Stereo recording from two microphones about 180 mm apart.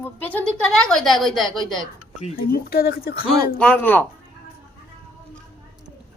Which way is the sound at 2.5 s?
55° left (ahead or behind).